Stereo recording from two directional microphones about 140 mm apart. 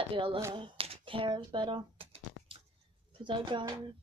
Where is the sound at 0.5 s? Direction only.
40° right (ahead or behind).